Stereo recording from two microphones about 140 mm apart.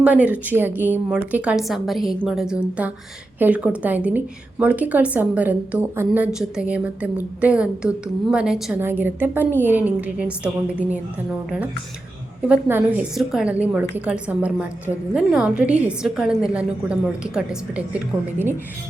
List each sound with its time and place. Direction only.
0.0 s a woman's voice: 10° right (ahead or behind)
8.8 s a woman's voice: 15° right (ahead or behind)
12.5 s a woman's voice: 15° right (ahead or behind)